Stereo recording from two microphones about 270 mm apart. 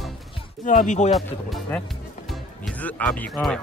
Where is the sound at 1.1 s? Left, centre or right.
Centre.